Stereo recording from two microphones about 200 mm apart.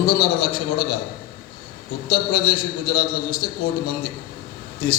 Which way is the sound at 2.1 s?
50° left (ahead or behind).